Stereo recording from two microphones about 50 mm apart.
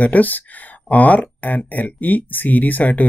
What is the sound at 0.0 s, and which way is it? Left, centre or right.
Speech, left.